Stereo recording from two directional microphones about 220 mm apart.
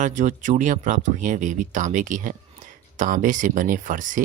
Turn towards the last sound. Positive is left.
turn(degrees=-35)  # may be behind; listen again after turning